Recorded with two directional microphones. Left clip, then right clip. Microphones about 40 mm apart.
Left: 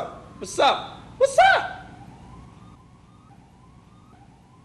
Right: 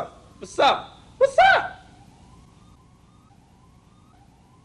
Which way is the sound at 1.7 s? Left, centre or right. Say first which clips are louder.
Left 7 dB; centre.